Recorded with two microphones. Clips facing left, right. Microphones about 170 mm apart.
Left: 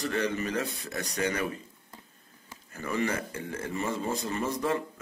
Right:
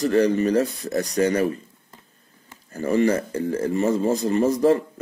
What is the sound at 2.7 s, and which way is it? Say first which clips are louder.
Speech: right 10 dB; 35° right (ahead or behind).